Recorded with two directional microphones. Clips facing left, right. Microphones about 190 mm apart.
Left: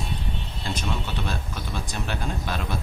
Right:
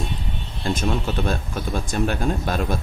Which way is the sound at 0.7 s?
50° right (ahead or behind).